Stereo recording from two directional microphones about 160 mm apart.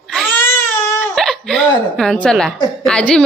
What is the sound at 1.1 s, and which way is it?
A woman's voice, 5° left (ahead or behind).